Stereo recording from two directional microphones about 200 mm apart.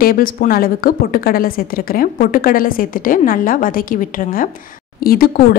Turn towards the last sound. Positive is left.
turn(degrees=50)  # may be behind; listen again after turning